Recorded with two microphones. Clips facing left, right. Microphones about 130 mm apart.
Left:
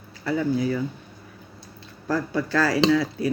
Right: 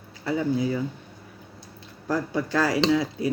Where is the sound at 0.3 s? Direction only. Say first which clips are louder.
Left 1 dB; 25° right (ahead or behind).